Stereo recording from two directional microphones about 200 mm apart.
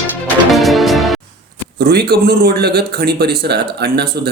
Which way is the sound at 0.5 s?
Centre (ahead or behind).